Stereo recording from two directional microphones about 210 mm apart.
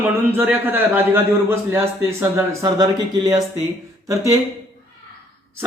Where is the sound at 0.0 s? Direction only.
10° right (ahead or behind).